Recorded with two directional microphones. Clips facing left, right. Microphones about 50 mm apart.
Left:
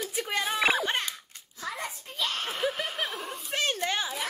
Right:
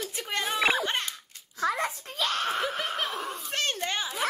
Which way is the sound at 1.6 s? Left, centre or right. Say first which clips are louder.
Right 8 dB; right.